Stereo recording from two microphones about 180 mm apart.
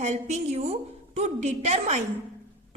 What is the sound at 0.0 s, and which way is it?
A woman's voice, 40° right (ahead or behind).